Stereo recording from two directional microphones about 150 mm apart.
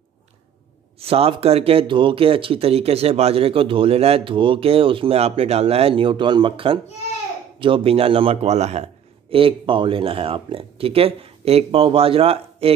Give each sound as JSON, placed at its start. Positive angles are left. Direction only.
{"t": 0.9, "sound": "speech", "side_deg": -40}